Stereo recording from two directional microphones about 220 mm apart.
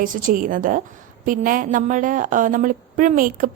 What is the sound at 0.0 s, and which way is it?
A woman's voice, 40° right (ahead or behind).